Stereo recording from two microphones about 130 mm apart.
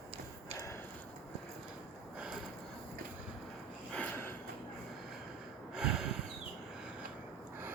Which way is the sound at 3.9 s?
10° left (ahead or behind).